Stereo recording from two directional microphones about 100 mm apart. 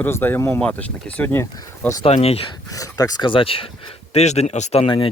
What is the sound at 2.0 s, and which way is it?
Speech, 85° left.